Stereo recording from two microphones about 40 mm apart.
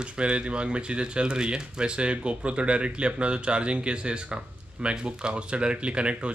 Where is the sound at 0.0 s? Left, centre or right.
Right.